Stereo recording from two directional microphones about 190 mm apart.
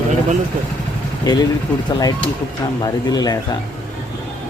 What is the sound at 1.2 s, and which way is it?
A man's voice, 20° left (ahead or behind).